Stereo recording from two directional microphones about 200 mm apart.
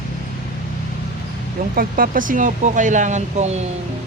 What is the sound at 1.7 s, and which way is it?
Speech, 45° right (ahead or behind).